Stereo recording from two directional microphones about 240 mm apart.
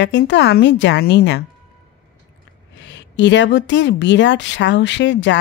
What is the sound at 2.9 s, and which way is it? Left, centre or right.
A woman's voice, left.